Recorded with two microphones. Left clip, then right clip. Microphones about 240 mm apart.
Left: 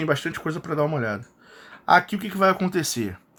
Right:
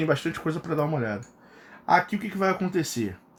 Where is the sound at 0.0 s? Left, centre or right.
Centre.